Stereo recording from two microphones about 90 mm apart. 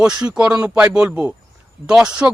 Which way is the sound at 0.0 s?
10° right (ahead or behind).